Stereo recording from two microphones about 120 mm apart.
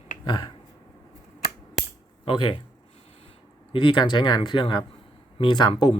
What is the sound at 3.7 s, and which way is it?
Speech, 40° left (ahead or behind).